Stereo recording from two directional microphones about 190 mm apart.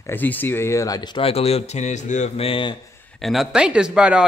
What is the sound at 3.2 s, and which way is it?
Speech, centre (ahead or behind).